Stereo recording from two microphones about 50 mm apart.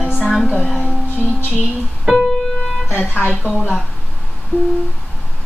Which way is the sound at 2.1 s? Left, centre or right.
Centre.